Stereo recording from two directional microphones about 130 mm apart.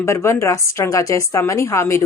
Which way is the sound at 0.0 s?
20° left (ahead or behind).